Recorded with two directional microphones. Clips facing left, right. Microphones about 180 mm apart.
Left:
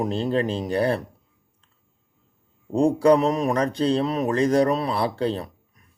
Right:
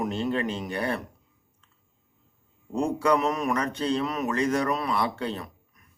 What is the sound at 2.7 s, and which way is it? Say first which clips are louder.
Speech: left 7 dB; 30° left (ahead or behind).